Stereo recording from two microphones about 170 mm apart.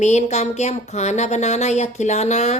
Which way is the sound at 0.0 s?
40° left (ahead or behind).